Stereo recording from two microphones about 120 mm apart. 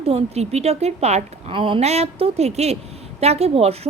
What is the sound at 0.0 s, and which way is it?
A woman's voice, 55° right (ahead or behind).